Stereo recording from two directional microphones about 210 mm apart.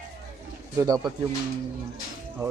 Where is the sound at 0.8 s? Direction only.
15° right (ahead or behind).